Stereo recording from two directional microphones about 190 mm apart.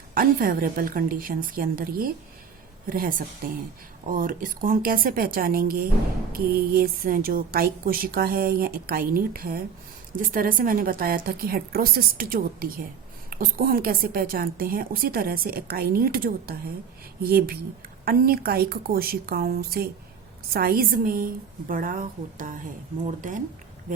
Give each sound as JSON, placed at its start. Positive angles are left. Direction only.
{"t": 0.1, "sound": "speech", "side_deg": -50}